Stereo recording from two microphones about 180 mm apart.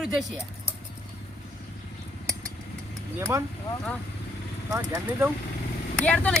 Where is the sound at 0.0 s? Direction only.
Centre (ahead or behind).